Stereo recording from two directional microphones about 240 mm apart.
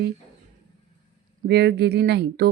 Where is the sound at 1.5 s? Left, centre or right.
Right.